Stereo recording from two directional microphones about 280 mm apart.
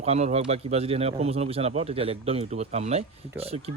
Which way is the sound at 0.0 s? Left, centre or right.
Right.